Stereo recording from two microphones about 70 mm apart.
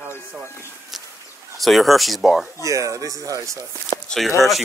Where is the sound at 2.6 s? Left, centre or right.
Right.